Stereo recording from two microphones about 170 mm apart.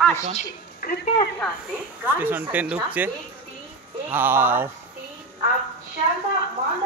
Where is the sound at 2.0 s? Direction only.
10° right (ahead or behind).